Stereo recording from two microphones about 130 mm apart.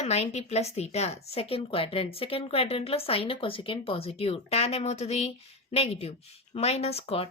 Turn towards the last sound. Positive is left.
turn(degrees=50)  # may be behind; listen again after turning